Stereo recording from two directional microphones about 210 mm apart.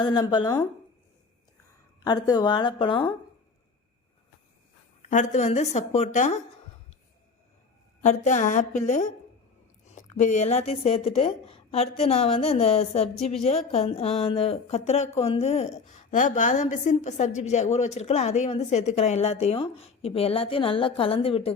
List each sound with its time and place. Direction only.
0.0 s speech: 20° left (ahead or behind)
2.0 s speech: 20° left (ahead or behind)
5.0 s a woman's voice: 35° left (ahead or behind)
8.0 s a woman's voice: 35° left (ahead or behind)